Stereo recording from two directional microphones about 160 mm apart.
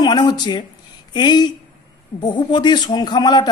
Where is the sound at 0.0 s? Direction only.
25° left (ahead or behind).